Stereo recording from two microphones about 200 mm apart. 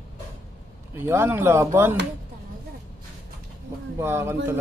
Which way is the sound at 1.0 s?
10° right (ahead or behind).